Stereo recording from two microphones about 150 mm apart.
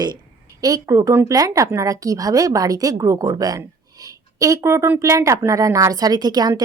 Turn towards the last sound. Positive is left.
turn(degrees=-25)  # may be behind; listen again after turning